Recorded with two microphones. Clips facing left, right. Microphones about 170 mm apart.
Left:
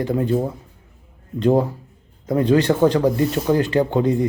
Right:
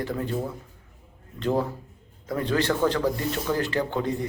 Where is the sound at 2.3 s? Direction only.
20° left (ahead or behind).